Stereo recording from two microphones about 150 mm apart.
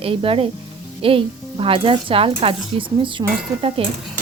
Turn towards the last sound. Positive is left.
turn(degrees=-40)  # may be behind; listen again after turning